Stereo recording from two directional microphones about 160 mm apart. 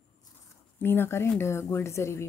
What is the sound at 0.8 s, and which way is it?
A woman's voice, 15° left (ahead or behind).